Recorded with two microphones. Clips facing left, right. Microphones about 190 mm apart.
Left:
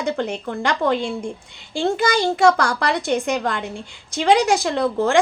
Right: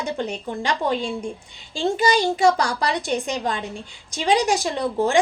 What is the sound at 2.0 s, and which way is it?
Speech, 15° right (ahead or behind).